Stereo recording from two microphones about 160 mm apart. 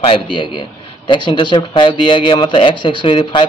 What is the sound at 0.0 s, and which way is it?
A man's voice, 30° left (ahead or behind).